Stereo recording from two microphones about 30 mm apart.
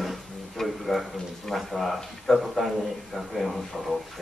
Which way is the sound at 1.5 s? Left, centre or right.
Centre.